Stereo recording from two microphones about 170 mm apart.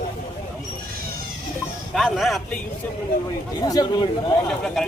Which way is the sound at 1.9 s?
Centre (ahead or behind).